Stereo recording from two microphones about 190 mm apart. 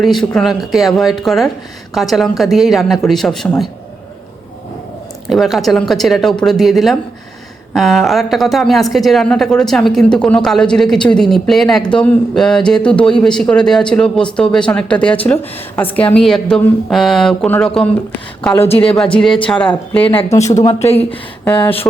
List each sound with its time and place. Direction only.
0.0 s a woman's voice: centre (ahead or behind)
5.3 s a woman's voice: centre (ahead or behind); by 20.6 s 15° left (ahead or behind)
20.6 s speech: 30° left (ahead or behind)
21.1 s speech: 10° left (ahead or behind)